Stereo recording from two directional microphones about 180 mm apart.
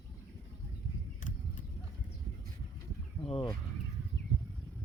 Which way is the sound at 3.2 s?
30° left (ahead or behind).